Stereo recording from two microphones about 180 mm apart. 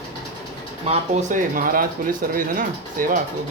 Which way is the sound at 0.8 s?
35° right (ahead or behind).